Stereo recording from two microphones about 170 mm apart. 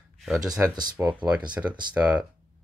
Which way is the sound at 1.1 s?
10° right (ahead or behind).